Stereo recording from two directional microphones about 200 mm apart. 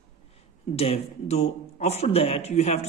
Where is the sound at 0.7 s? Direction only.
30° left (ahead or behind).